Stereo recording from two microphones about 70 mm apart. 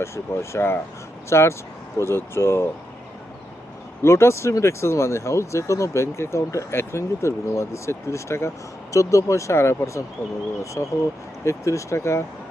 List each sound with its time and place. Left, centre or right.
0.0 s speech: left
4.0 s speech: left